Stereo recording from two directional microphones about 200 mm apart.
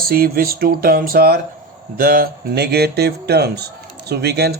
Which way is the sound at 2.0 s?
45° right (ahead or behind).